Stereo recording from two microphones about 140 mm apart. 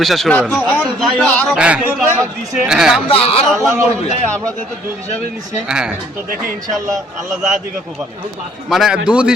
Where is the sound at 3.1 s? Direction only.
45° left (ahead or behind).